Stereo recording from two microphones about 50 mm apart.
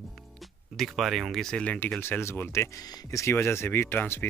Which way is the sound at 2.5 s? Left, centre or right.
Left.